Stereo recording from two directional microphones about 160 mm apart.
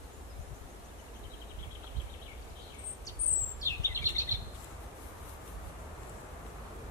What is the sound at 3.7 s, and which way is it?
Bird, 20° left (ahead or behind).